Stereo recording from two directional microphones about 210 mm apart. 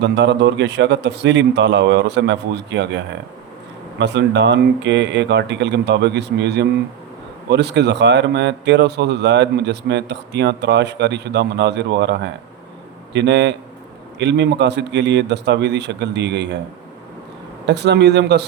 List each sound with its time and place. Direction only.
0.0 s speech: 55° right (ahead or behind)
17.7 s speech: 55° right (ahead or behind)